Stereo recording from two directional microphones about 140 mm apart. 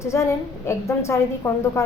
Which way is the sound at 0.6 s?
20° left (ahead or behind).